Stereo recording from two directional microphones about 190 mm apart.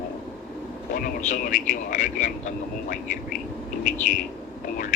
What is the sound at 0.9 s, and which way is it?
A man's voice, 45° left (ahead or behind).